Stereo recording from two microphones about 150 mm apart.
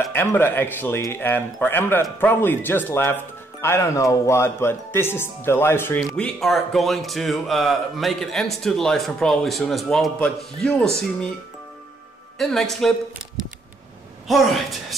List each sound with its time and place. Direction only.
0.1 s speech: 15° left (ahead or behind)
6.0 s a man's voice: 5° left (ahead or behind)
12.4 s a man's voice: centre (ahead or behind)
14.2 s a man's voice: centre (ahead or behind)